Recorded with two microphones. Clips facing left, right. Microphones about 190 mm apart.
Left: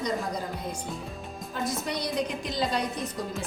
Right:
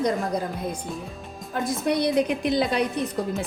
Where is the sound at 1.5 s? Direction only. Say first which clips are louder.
Right 7 dB; 55° right (ahead or behind).